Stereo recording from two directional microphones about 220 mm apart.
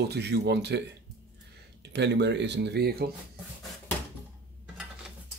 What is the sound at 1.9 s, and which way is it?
Speech, 50° right (ahead or behind).